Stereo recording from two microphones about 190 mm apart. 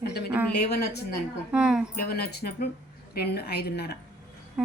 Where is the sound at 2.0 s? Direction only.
55° left (ahead or behind).